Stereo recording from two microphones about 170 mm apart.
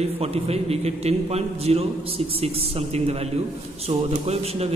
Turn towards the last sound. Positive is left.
turn(degrees=-35)  # may be behind; listen again after turning